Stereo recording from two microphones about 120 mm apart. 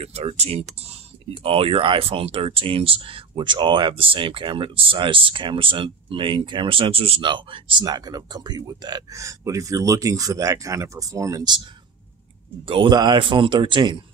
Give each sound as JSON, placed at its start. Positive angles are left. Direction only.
{"t": 0.0, "sound": "speech", "side_deg": -60}
{"t": 7.8, "sound": "speech", "side_deg": -35}
{"t": 12.6, "sound": "speech", "side_deg": -50}